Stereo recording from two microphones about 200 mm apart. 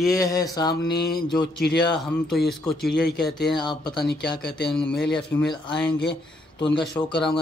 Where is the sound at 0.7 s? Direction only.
55° left (ahead or behind).